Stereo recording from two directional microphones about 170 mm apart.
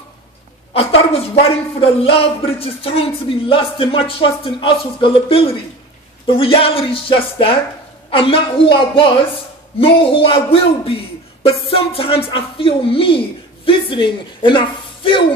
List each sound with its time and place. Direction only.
0.7 s speech: 35° left (ahead or behind)